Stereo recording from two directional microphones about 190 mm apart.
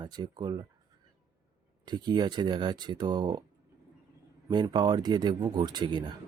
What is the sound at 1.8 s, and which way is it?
Speech, 25° right (ahead or behind).